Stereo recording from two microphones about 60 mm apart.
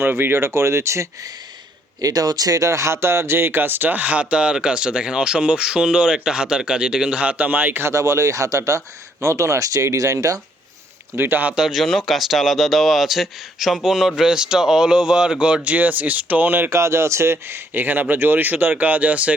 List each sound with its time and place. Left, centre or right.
0.0 s speech: right
2.0 s speech: right
7.9 s speech: right
11.2 s a man's voice: right
11.5 s speech: centre; by 16.6 s right
16.6 s speech: right